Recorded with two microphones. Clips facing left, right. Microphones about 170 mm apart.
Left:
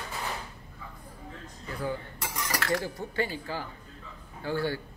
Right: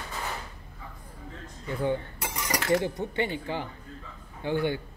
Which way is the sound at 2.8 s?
20° right (ahead or behind).